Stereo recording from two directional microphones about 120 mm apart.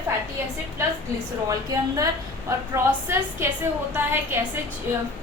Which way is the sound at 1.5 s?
30° right (ahead or behind).